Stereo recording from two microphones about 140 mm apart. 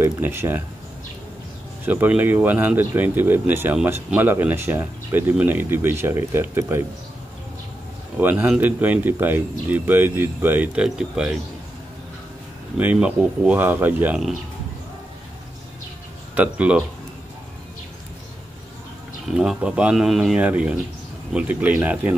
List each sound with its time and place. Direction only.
0.2 s speech: 15° right (ahead or behind)
1.9 s speech: 15° right (ahead or behind)
8.2 s speech: 15° right (ahead or behind)
12.7 s speech: 10° right (ahead or behind)
16.3 s speech: 10° right (ahead or behind)
19.2 s speech: 5° right (ahead or behind)